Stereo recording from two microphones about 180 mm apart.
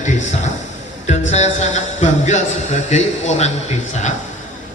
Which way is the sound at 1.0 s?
40° left (ahead or behind).